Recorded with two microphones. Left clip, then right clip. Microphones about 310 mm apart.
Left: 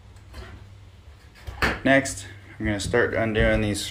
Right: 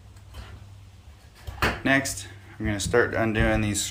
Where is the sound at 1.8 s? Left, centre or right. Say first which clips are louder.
Left 6 dB; centre.